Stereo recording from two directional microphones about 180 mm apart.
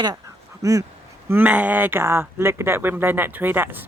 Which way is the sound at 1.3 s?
10° right (ahead or behind).